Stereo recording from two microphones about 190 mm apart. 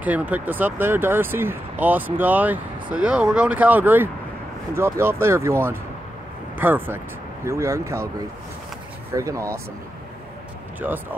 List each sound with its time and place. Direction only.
0.0 s speech: 10° right (ahead or behind)
10.8 s speech: 10° right (ahead or behind)